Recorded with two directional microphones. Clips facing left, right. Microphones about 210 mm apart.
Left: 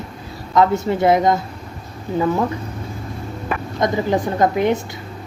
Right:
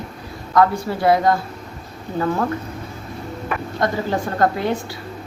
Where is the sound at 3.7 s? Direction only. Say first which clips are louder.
Left 3 dB; 15° left (ahead or behind).